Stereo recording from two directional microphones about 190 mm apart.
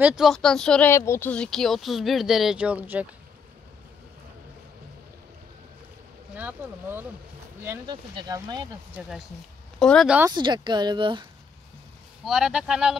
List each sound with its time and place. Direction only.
0.0 s speech: 5° right (ahead or behind)
6.3 s speech: 10° right (ahead or behind)
9.8 s speech: centre (ahead or behind)
10.3 s speech: 25° right (ahead or behind)
12.3 s speech: 5° right (ahead or behind)